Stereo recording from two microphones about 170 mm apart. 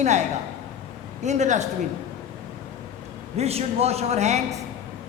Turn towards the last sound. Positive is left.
turn(degrees=-40)  # may be behind; listen again after turning